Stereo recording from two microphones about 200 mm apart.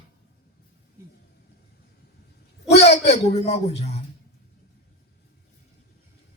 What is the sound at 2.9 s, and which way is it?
Speech, 35° left (ahead or behind).